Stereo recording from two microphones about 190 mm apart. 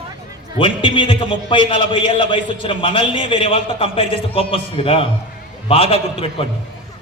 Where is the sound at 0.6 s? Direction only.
25° left (ahead or behind).